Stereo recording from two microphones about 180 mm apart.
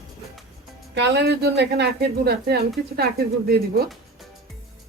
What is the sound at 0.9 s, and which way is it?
Speech, 70° right (ahead or behind).